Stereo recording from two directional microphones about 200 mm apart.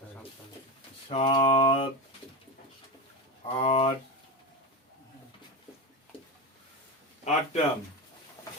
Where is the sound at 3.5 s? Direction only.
30° left (ahead or behind).